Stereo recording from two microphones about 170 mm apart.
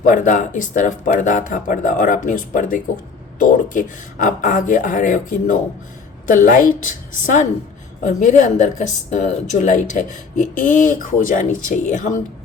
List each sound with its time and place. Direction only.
0.0 s a woman's voice: 50° left (ahead or behind)